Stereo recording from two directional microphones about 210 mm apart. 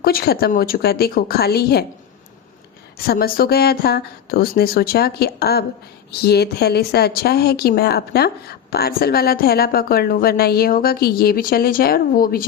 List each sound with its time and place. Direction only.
0.0 s a woman's voice: 45° left (ahead or behind)
3.1 s a woman's voice: 45° left (ahead or behind)